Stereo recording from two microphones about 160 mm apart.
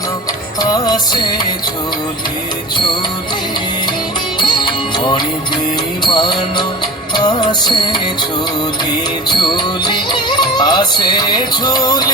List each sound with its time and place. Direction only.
0.6 s music: 25° left (ahead or behind)
4.4 s music: 30° left (ahead or behind)
9.3 s music: 30° left (ahead or behind)